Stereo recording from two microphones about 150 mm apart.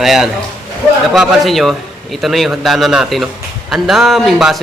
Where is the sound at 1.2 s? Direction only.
Centre (ahead or behind).